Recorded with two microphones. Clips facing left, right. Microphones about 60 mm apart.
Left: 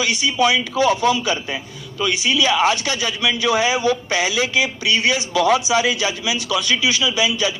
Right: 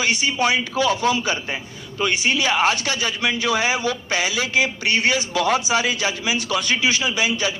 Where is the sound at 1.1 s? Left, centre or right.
Right.